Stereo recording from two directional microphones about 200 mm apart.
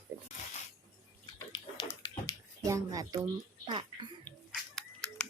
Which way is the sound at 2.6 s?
15° right (ahead or behind).